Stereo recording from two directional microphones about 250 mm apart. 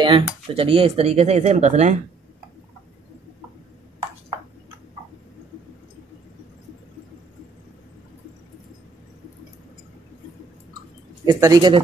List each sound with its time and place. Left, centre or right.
0.0 s speech: right
11.2 s speech: centre